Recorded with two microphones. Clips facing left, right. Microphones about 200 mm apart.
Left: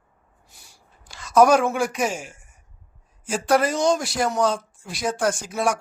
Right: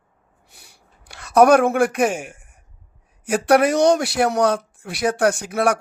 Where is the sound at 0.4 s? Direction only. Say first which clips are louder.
Right 3 dB; 60° right (ahead or behind).